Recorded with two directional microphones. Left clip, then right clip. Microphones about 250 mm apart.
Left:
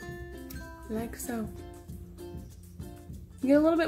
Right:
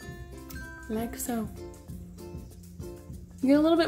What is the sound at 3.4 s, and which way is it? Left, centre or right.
Speech, centre.